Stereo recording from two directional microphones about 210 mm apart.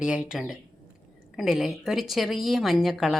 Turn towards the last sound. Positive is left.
turn(degrees=0)  # may be behind; listen again after turning